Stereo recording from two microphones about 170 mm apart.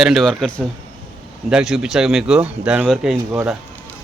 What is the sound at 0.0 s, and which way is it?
Speech, centre (ahead or behind).